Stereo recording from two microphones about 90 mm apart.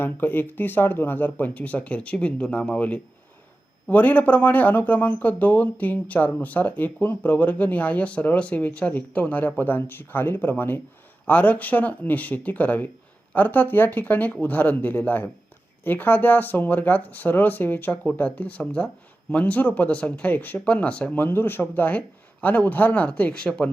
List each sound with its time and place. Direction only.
0.0 s speech: 20° left (ahead or behind)